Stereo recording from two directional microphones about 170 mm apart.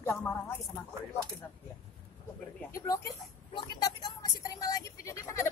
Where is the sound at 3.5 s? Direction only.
25° left (ahead or behind).